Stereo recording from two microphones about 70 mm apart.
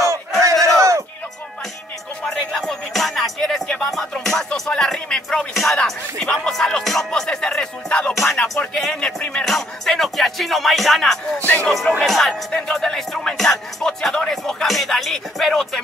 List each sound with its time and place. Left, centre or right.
0.4 s battle cry: right
2.2 s music: centre
5.5 s music: centre
5.9 s speech: centre
8.1 s music: centre
11.3 s speech: left
11.6 s speech: centre
12.0 s music: centre